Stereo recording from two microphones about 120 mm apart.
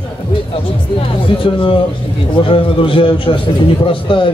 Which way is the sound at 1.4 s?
45° left (ahead or behind).